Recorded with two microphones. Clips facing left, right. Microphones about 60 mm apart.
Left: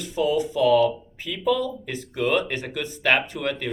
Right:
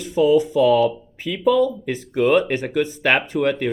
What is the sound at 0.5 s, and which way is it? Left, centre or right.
Speech, right.